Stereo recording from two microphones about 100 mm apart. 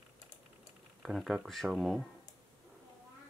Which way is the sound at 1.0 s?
5° right (ahead or behind).